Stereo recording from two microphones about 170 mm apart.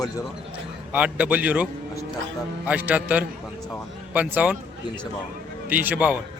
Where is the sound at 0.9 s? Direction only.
10° right (ahead or behind).